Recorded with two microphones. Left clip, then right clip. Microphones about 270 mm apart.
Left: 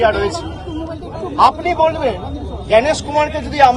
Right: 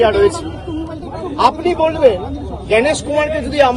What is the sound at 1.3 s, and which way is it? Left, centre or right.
Speech, centre.